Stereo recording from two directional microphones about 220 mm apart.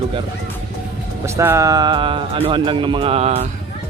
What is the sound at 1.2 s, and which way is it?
Speech, 10° right (ahead or behind).